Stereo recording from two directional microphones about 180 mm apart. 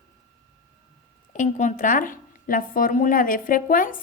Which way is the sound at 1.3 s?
45° left (ahead or behind).